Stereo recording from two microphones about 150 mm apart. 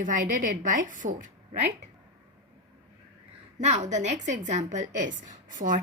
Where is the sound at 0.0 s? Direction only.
60° right (ahead or behind).